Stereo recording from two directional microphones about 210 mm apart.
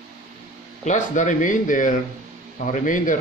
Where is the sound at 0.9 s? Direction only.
35° left (ahead or behind).